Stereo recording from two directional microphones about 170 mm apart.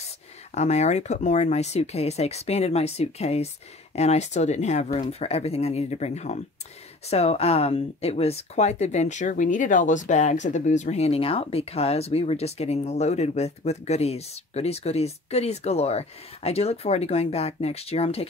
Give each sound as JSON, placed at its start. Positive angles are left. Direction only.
{"t": 0.6, "sound": "speech", "side_deg": 40}